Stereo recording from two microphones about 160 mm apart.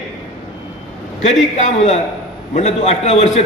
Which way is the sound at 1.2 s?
45° left (ahead or behind).